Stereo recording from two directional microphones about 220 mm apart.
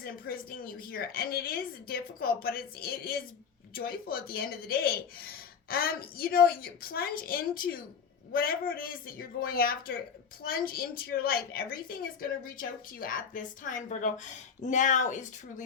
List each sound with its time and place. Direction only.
0.0 s a woman's voice: 40° left (ahead or behind)